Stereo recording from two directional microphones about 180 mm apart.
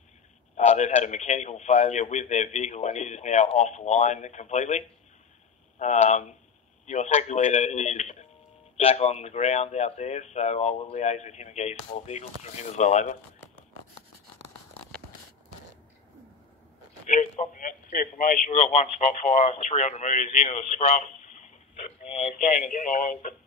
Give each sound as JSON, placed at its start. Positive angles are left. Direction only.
{"t": 0.6, "sound": "speech", "side_deg": 40}
{"t": 17.0, "sound": "a man's voice", "side_deg": 45}